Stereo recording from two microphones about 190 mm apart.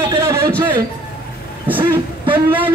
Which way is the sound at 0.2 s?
15° right (ahead or behind).